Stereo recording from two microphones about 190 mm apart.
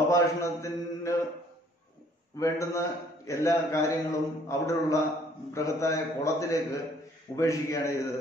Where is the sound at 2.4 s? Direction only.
15° left (ahead or behind).